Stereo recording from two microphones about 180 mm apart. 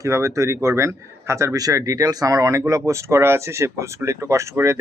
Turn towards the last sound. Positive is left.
turn(degrees=-15)  # may be behind; listen again after turning